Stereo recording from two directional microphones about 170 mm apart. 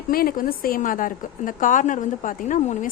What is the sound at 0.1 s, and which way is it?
A woman's voice, 60° left (ahead or behind).